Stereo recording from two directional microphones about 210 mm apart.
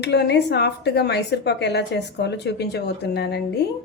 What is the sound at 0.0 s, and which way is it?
A woman's voice, 55° left (ahead or behind).